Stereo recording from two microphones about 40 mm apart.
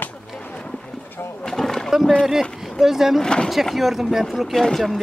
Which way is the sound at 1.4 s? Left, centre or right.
Centre.